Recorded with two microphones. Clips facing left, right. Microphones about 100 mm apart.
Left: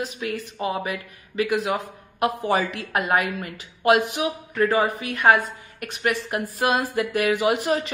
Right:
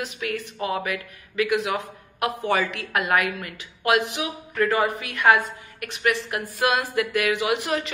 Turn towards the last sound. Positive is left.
turn(degrees=35)  # may be behind; listen again after turning